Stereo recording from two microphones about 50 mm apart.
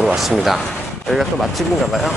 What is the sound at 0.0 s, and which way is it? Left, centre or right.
Speech, centre.